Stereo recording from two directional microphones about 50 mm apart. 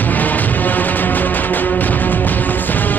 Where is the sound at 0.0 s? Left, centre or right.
Left.